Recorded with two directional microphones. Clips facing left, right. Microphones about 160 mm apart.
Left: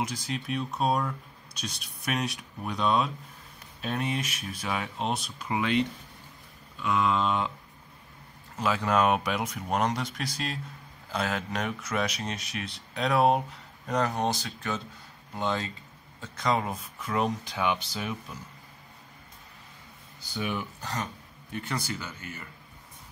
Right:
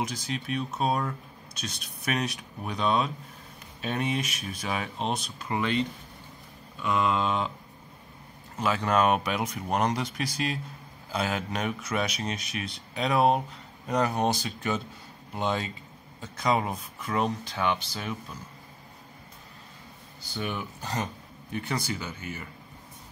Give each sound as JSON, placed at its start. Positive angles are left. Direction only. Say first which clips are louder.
{"t": 0.1, "sound": "speech", "louder": "even", "side_deg": 0}
{"t": 6.8, "sound": "speech", "louder": "even", "side_deg": 0}
{"t": 8.5, "sound": "speech", "louder": "even", "side_deg": 0}
{"t": 20.3, "sound": "speech", "louder": "left 1 dB", "side_deg": 5}
{"t": 20.8, "sound": "speech", "louder": "right 2 dB", "side_deg": -20}